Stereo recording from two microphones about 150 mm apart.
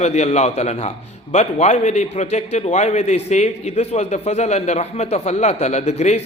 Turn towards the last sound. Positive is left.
turn(degrees=50)  # may be behind; listen again after turning